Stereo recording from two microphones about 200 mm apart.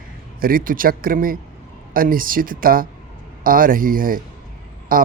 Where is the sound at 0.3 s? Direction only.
45° right (ahead or behind).